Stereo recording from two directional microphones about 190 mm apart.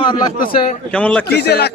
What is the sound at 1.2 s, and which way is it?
Speech, 60° left (ahead or behind).